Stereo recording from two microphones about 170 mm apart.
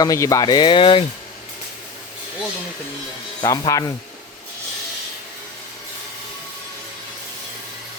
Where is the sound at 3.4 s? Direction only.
20° left (ahead or behind).